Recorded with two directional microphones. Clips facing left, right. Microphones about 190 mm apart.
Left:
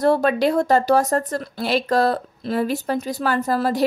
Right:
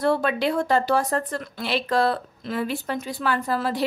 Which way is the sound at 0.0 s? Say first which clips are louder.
Left 5 dB; 40° left (ahead or behind).